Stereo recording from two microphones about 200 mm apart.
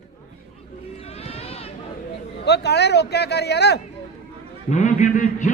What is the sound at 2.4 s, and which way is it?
A man's voice, 55° left (ahead or behind).